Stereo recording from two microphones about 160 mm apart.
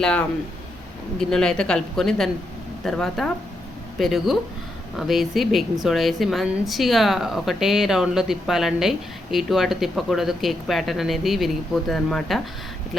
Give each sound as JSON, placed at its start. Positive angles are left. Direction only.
{"t": 0.0, "sound": "speech", "side_deg": 5}